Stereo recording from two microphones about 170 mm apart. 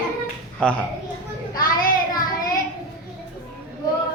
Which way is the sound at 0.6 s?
5° left (ahead or behind).